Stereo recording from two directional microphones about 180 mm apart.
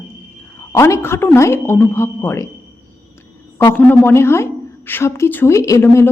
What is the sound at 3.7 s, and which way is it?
A woman's voice, 10° left (ahead or behind).